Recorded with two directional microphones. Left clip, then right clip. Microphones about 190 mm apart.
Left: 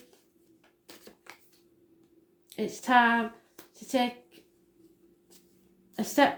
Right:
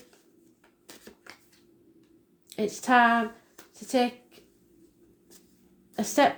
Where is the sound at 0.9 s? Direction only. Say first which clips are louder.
Right 2 dB; 5° left (ahead or behind).